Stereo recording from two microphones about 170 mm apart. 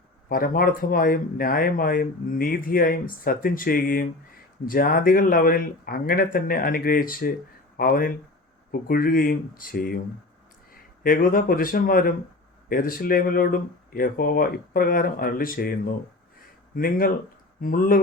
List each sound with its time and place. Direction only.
0.3 s speech: 60° left (ahead or behind)
11.0 s speech: 55° left (ahead or behind)